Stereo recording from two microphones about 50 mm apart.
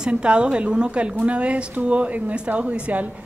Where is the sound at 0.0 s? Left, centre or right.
Centre.